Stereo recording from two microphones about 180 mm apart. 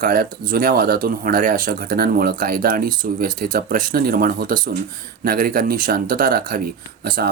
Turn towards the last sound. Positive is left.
turn(degrees=-55)  # may be behind; listen again after turning